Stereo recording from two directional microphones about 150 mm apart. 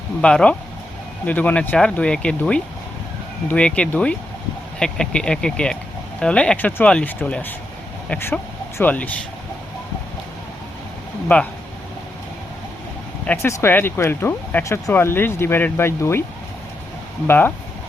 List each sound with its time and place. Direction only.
0.2 s speech: 5° left (ahead or behind)
11.3 s speech: 10° left (ahead or behind)
13.2 s speech: 15° left (ahead or behind)
17.2 s speech: 10° left (ahead or behind)